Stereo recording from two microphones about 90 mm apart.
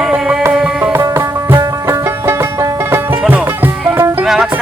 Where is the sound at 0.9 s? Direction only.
30° right (ahead or behind).